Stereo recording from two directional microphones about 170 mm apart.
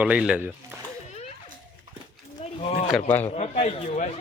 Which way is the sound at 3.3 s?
40° left (ahead or behind).